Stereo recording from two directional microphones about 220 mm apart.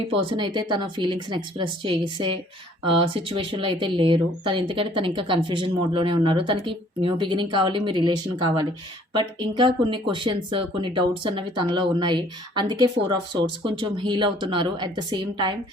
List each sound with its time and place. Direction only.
0.1 s speech: 25° right (ahead or behind)